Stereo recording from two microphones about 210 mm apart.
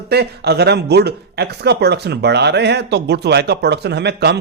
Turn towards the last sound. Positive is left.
turn(degrees=-50)  # may be behind; listen again after turning